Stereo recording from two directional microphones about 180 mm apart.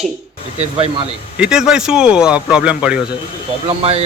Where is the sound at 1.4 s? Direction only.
5° right (ahead or behind).